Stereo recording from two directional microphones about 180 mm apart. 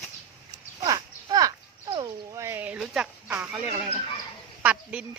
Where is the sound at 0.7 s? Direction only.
20° right (ahead or behind).